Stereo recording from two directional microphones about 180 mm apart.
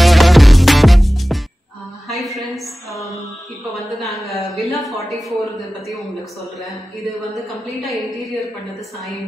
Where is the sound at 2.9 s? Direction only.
20° left (ahead or behind).